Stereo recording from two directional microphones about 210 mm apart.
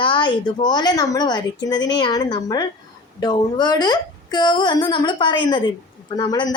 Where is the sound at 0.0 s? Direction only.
20° left (ahead or behind).